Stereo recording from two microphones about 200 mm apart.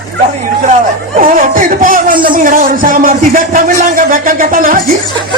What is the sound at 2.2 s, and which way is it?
Speech, 45° right (ahead or behind).